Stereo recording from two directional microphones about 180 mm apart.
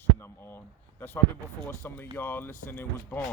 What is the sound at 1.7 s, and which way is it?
Speech, 10° left (ahead or behind).